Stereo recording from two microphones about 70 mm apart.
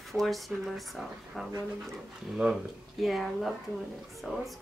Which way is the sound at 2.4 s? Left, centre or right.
Centre.